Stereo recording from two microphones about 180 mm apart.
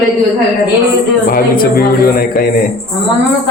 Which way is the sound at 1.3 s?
55° left (ahead or behind).